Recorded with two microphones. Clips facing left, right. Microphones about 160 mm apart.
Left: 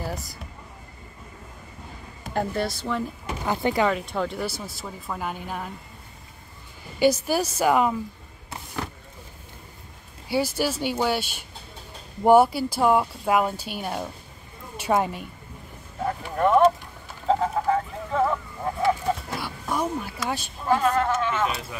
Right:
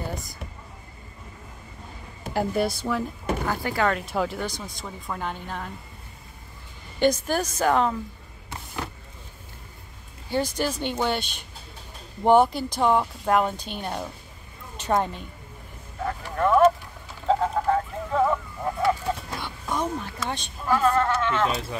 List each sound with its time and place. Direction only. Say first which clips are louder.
0.0 s a sound: left 1 dB; centre (ahead or behind)
2.3 s speech: right 2 dB; 10° right (ahead or behind)
3.4 s speech: left 4 dB; 20° left (ahead or behind)
3.9 s speech: even; 5° right (ahead or behind)
7.0 s speech: left 1 dB; 10° left (ahead or behind)
10.2 s speech: left 1 dB; 10° left (ahead or behind)
16.0 s speech: left 2 dB; 20° left (ahead or behind)
17.3 s a sound: even; centre (ahead or behind)
20.6 s speech: even; 15° left (ahead or behind)